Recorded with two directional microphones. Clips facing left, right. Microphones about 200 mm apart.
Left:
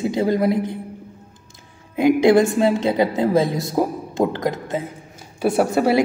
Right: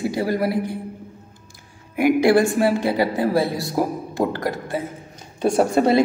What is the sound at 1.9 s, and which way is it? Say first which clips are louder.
A woman's voice: left 2 dB; 20° left (ahead or behind).